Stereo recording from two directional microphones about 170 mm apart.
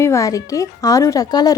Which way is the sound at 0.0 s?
20° left (ahead or behind).